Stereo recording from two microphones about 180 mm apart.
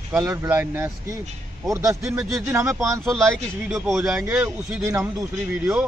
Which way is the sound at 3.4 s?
Centre (ahead or behind).